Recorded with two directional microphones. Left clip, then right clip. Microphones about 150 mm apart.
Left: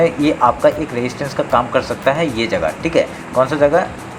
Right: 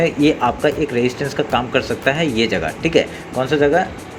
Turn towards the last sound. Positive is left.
turn(degrees=-30)  # may be behind; listen again after turning